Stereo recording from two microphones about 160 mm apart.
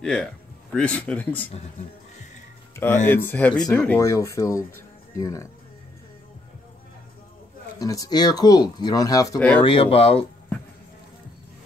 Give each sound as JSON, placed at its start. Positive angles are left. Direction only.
{"t": 0.0, "sound": "speech", "side_deg": 5}
{"t": 1.5, "sound": "speech", "side_deg": 40}
{"t": 2.7, "sound": "speech", "side_deg": 15}
{"t": 7.8, "sound": "speech", "side_deg": 20}
{"t": 9.6, "sound": "speech", "side_deg": 35}